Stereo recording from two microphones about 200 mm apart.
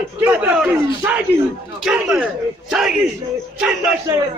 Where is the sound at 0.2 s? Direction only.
5° right (ahead or behind).